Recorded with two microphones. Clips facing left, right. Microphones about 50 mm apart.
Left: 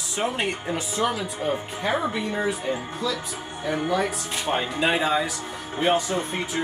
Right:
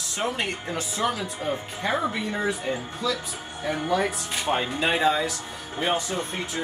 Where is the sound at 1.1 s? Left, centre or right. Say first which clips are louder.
Left 2 dB; centre.